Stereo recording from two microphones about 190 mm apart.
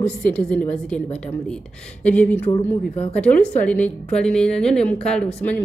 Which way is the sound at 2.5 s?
30° left (ahead or behind).